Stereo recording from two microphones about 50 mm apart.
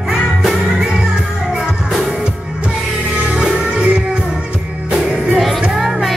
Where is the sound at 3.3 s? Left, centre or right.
Centre.